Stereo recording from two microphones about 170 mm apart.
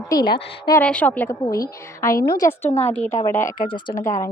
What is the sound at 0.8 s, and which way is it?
A woman's voice, 10° left (ahead or behind).